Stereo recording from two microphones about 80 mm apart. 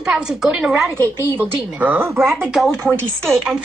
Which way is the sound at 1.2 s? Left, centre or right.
Right.